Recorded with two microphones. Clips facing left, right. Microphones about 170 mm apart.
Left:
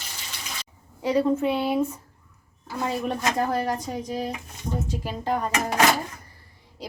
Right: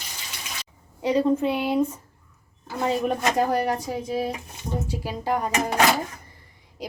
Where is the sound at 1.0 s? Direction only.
20° right (ahead or behind).